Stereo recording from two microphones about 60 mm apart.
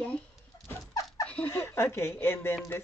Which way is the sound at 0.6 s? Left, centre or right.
Left.